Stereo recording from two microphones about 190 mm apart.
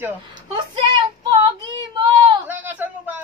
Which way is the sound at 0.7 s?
25° right (ahead or behind).